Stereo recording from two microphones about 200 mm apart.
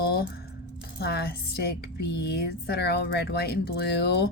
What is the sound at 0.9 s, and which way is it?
Speech, 55° left (ahead or behind).